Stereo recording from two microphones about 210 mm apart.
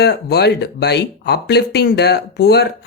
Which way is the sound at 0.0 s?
50° left (ahead or behind).